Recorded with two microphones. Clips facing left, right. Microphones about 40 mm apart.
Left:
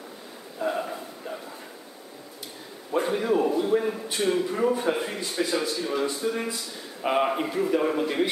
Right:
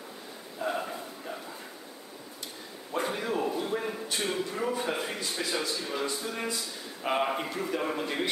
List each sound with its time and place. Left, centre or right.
0.6 s a sound: centre
2.9 s a man's voice: centre
5.8 s a man's voice: centre